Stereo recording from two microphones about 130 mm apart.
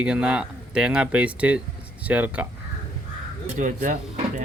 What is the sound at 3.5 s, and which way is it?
Speech, 85° right.